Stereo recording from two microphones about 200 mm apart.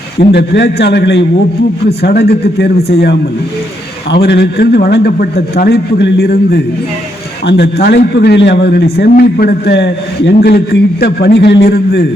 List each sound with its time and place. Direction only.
0.3 s a man's voice: 60° left (ahead or behind)
4.1 s a man's voice: 55° left (ahead or behind)